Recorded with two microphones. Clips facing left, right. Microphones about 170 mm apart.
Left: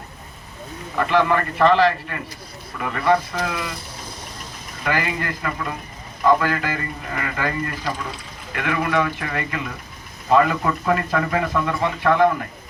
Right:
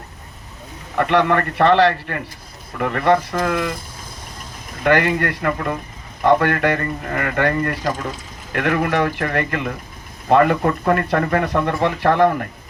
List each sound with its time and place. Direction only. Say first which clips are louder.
0.9 s speech: right 2 dB; 65° right (ahead or behind)
4.8 s speech: right 7 dB; 65° right (ahead or behind)